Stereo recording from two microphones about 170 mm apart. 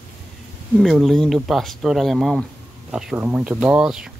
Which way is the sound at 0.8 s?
Centre (ahead or behind).